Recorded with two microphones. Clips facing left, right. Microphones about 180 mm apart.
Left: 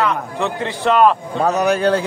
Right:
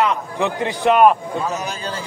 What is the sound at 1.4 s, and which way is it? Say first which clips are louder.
Speech: left 9 dB; 65° left (ahead or behind).